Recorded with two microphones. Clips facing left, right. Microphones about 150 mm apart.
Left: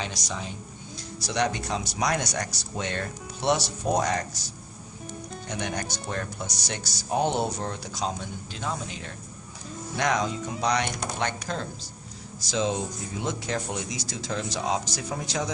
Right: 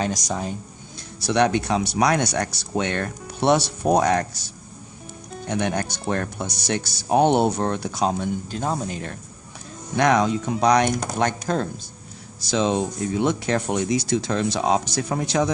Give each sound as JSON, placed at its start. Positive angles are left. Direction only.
{"t": 0.0, "sound": "speech", "side_deg": -45}
{"t": 1.3, "sound": "speech", "side_deg": -60}
{"t": 5.5, "sound": "speech", "side_deg": -55}
{"t": 10.0, "sound": "speech", "side_deg": -60}
{"t": 12.4, "sound": "speech", "side_deg": -70}